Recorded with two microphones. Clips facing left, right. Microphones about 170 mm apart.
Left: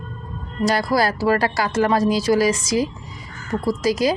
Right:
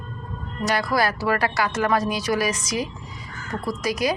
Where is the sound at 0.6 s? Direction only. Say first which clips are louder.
Left 3 dB; 35° left (ahead or behind).